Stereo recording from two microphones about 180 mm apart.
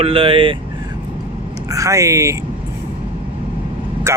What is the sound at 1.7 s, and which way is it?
Speech, 15° right (ahead or behind).